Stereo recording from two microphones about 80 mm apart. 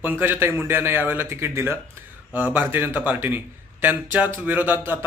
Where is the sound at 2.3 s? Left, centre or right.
Right.